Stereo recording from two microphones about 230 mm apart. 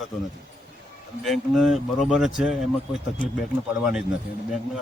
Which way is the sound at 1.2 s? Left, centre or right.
Centre.